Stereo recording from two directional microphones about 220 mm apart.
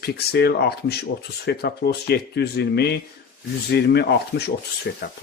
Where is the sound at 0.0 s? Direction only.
45° left (ahead or behind).